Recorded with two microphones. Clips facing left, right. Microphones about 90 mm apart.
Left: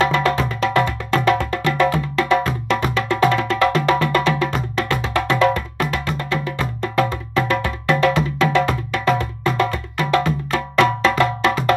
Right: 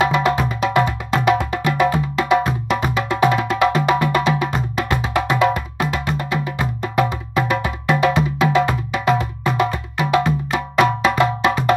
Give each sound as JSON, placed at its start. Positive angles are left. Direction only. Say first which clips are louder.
{"t": 0.0, "sound": "music", "louder": "right 1 dB", "side_deg": -15}